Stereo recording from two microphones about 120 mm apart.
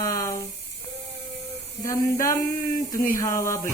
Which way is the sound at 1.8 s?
25° left (ahead or behind).